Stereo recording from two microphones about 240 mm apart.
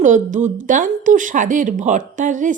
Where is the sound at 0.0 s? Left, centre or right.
Right.